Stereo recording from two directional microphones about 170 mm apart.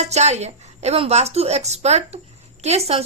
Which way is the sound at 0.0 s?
40° right (ahead or behind).